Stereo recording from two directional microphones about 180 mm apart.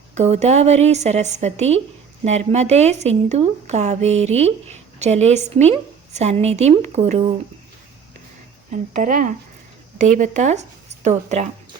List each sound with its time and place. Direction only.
0.1 s speech: 40° right (ahead or behind)
8.9 s speech: 45° right (ahead or behind)